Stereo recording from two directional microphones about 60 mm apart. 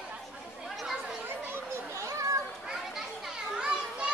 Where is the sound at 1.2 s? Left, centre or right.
Right.